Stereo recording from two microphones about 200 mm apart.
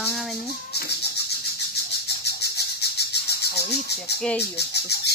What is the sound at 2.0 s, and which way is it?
Bird, 55° left (ahead or behind).